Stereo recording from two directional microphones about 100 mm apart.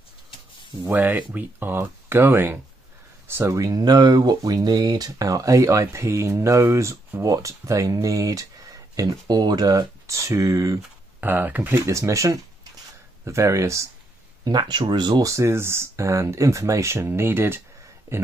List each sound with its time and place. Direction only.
0.8 s speech: 15° right (ahead or behind)
3.5 s speech: 40° right (ahead or behind)
11.1 s speech: 20° right (ahead or behind)
11.8 s speech: 30° right (ahead or behind)
14.4 s speech: 45° right (ahead or behind)
15.2 s speech: 30° right (ahead or behind)